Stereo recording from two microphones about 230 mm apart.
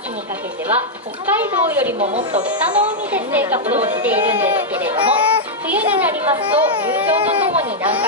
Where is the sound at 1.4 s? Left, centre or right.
Centre.